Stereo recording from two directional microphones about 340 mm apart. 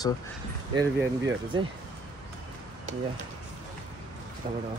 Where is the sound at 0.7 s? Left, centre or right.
Centre.